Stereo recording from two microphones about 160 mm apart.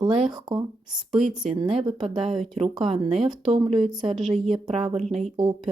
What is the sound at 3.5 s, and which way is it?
Speech, 40° right (ahead or behind).